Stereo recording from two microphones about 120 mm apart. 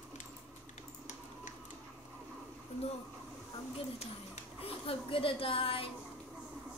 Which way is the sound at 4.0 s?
60° left (ahead or behind).